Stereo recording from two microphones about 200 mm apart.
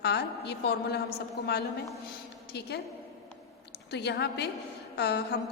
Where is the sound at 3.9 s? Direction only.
55° left (ahead or behind).